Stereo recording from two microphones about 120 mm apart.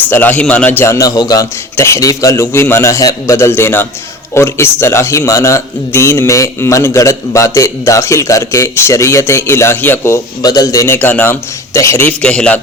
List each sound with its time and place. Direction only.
0.1 s a man's voice: 15° left (ahead or behind)
10.4 s a man's voice: 30° left (ahead or behind)
12.2 s a man's voice: 10° left (ahead or behind)